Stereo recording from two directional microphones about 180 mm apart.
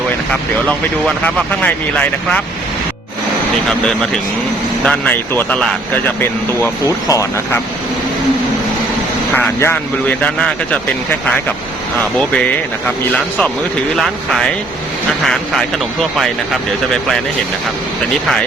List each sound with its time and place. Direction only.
1.0 s speech: 5° left (ahead or behind)
3.7 s speech: 5° left (ahead or behind)
6.1 s speech: 15° left (ahead or behind)
9.6 s speech: 10° left (ahead or behind)
13.9 s speech: centre (ahead or behind)